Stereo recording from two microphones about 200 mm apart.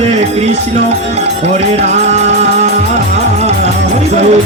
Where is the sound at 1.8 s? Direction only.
35° right (ahead or behind).